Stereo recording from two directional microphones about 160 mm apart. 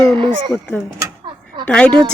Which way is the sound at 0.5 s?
10° left (ahead or behind).